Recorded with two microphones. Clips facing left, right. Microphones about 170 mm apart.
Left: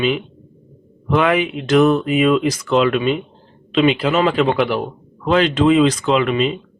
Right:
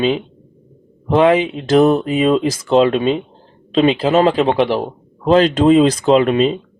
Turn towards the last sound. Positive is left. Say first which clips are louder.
# right 4 dB
turn(degrees=-35)  # may be behind; listen again after turning